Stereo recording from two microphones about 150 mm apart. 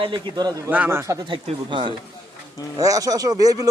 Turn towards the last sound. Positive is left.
turn(degrees=-25)  # may be behind; listen again after turning